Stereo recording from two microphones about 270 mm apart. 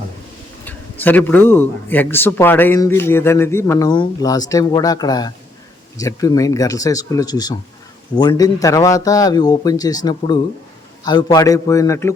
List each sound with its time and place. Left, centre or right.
0.6 s a man's voice: centre